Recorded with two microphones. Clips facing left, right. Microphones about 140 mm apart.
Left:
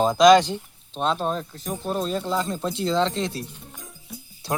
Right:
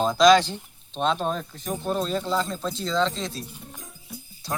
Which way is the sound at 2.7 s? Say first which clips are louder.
Left 2 dB; 60° left (ahead or behind).